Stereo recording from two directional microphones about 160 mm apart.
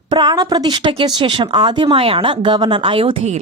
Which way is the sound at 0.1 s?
25° right (ahead or behind).